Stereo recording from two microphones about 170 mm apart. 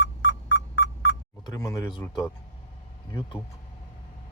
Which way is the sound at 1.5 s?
15° left (ahead or behind).